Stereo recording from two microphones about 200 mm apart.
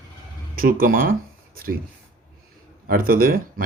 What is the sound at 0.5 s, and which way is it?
Speech, 45° right (ahead or behind).